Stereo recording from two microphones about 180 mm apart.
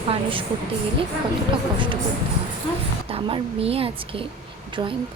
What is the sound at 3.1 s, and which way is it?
A woman's voice, 30° right (ahead or behind).